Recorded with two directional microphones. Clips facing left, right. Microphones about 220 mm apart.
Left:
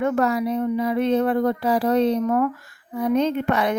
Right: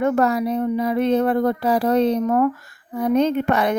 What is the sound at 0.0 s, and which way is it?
Speech, 40° right (ahead or behind).